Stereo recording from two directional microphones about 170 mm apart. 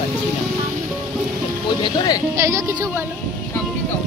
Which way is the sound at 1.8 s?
25° left (ahead or behind).